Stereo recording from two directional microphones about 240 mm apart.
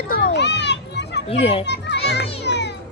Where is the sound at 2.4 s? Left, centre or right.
Left.